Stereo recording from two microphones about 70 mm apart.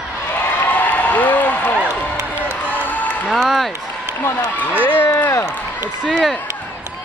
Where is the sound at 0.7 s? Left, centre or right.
Left.